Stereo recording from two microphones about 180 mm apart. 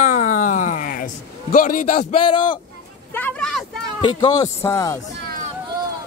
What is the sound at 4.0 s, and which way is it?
Speech, 25° left (ahead or behind).